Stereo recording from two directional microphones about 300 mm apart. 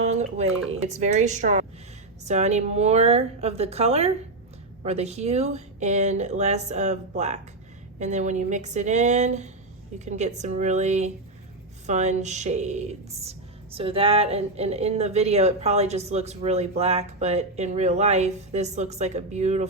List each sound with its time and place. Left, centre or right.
0.2 s speech: right